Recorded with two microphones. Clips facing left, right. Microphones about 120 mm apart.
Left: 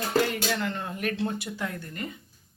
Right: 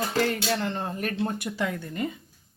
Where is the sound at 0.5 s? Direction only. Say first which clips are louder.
Right 2 dB; 35° right (ahead or behind).